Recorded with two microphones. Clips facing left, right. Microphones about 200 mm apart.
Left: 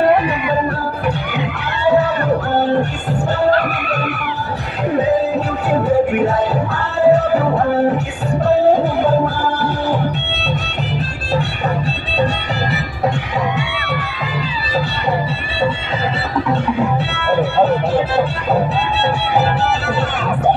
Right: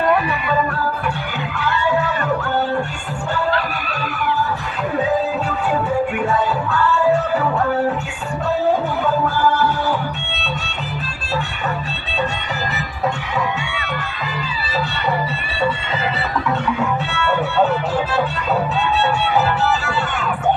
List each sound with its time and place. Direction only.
1.9 s music: 35° left (ahead or behind)
6.2 s music: 40° left (ahead or behind)
9.0 s music: 35° left (ahead or behind)
16.4 s music: 30° left (ahead or behind)